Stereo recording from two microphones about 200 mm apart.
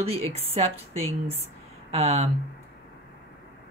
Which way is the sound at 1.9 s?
30° right (ahead or behind).